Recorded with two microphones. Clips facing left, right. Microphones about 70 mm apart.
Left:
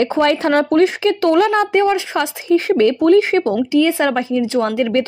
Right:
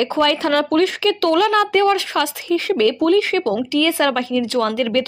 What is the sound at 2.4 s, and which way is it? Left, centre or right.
Speech, left.